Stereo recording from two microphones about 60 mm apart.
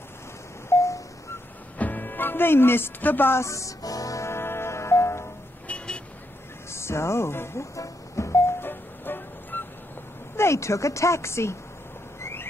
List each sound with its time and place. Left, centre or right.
0.7 s a sound: left
1.8 s music: left
3.3 s music: left
4.3 s music: left
5.7 s vehicle: centre
6.7 s music: left
8.5 s music: left
10.3 s speech: left
12.2 s a sound: left